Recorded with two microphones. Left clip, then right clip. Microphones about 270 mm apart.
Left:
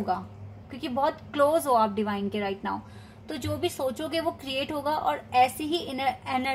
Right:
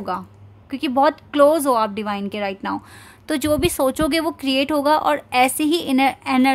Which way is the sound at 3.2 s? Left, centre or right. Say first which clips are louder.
Right 11 dB; right.